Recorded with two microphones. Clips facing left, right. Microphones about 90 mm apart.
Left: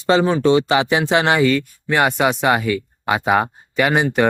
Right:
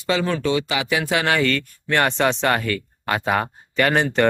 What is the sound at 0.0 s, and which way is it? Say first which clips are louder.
Speech: left 6 dB; 30° left (ahead or behind).